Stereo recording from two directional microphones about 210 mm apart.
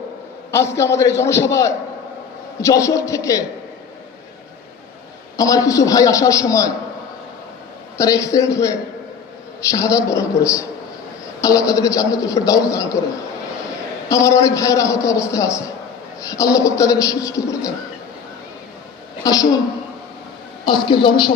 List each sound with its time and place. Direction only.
0.5 s a man's voice: 15° left (ahead or behind)
5.4 s a man's voice: 15° left (ahead or behind)
7.9 s a man's voice: 15° left (ahead or behind)
14.1 s a man's voice: 15° left (ahead or behind)
19.2 s a woman's voice: 20° left (ahead or behind)
20.7 s a woman's voice: 20° left (ahead or behind)